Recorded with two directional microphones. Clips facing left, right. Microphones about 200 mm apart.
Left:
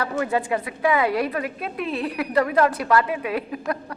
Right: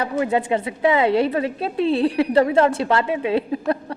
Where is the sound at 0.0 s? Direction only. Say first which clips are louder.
Right 3 dB; 20° right (ahead or behind).